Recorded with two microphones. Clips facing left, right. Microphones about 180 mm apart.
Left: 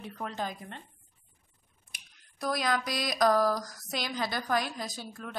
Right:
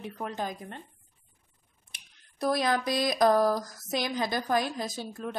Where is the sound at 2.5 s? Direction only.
25° right (ahead or behind).